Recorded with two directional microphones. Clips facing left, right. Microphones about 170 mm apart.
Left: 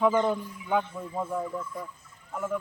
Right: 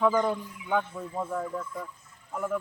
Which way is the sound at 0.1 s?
25° left (ahead or behind).